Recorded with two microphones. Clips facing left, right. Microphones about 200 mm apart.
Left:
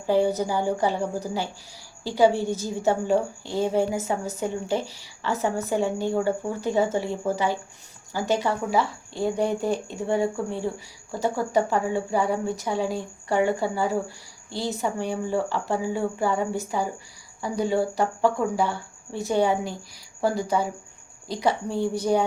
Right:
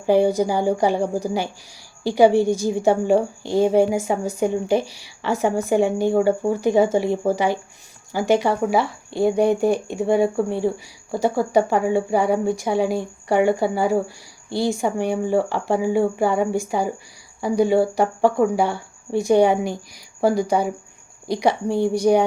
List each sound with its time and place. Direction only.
0.0 s a woman's voice: 15° right (ahead or behind)